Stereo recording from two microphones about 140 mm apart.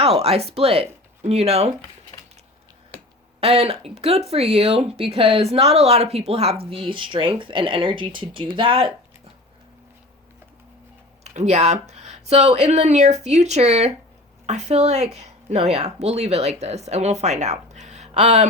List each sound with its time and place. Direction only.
0.0 s speech: 45° right (ahead or behind)
3.4 s speech: 45° right (ahead or behind)
11.2 s speech: 50° right (ahead or behind)